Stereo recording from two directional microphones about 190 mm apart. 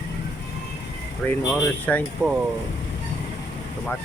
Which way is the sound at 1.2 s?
10° left (ahead or behind).